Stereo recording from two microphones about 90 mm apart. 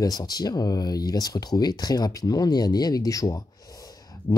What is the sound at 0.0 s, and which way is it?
Speech, 45° left (ahead or behind).